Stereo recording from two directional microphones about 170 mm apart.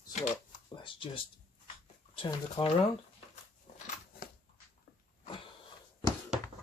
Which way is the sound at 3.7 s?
45° left (ahead or behind).